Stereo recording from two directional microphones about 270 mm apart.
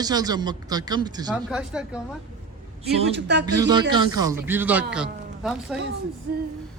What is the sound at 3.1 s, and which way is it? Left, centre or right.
Speech, right.